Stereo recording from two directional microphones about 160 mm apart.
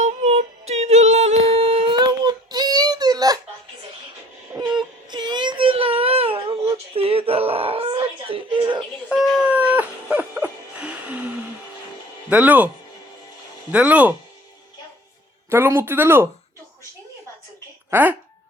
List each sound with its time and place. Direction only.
0.0 s music: 45° right (ahead or behind); by 3.3 s 25° right (ahead or behind)
4.6 s music: 25° right (ahead or behind)
5.1 s baby cry: 25° right (ahead or behind)
6.9 s wail: 35° right (ahead or behind)
9.0 s music: centre (ahead or behind)
12.3 s speech: 10° right (ahead or behind)
15.4 s speech: 15° right (ahead or behind)